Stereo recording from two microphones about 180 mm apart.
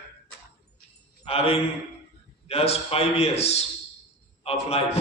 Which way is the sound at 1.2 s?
35° left (ahead or behind).